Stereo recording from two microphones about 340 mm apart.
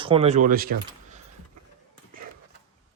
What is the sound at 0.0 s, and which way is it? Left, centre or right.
Speech, centre.